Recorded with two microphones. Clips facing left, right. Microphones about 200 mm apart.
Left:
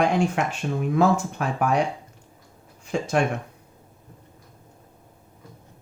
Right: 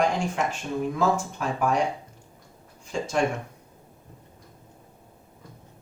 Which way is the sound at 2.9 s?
60° left (ahead or behind).